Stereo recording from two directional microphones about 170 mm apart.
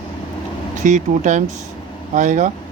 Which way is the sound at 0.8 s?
45° right (ahead or behind).